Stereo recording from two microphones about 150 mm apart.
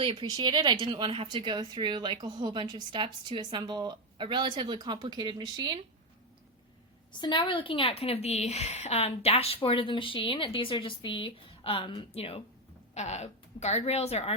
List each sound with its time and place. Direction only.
0.0 s speech: 30° right (ahead or behind)
7.1 s a woman's voice: 30° left (ahead or behind)